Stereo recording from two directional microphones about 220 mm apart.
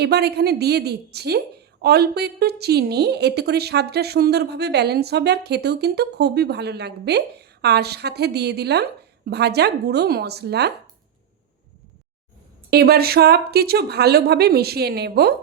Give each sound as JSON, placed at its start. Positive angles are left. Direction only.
{"t": 0.0, "sound": "a woman's voice", "side_deg": -50}
{"t": 12.7, "sound": "a woman's voice", "side_deg": -45}